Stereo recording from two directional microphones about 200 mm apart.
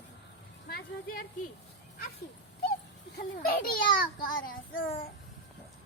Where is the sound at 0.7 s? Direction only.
45° left (ahead or behind).